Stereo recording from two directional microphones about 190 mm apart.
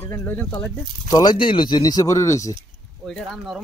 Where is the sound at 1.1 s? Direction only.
20° left (ahead or behind).